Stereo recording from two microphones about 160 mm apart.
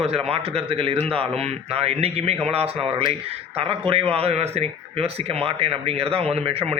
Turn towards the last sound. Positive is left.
turn(degrees=-40)  # may be behind; listen again after turning